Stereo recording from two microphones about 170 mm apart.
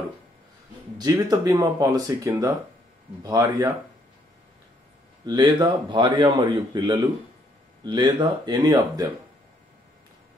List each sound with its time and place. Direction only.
0.9 s a man's voice: 20° right (ahead or behind)
5.2 s a man's voice: 25° right (ahead or behind)